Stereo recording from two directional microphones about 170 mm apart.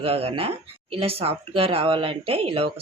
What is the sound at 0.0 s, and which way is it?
Speech, 35° right (ahead or behind).